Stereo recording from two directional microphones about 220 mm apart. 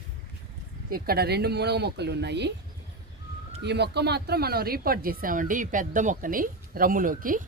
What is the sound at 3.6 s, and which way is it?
Speech, 50° right (ahead or behind).